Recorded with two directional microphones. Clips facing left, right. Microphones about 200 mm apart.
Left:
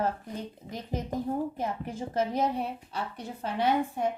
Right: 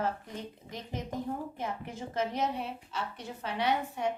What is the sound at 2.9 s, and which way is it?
Speech, 45° left (ahead or behind).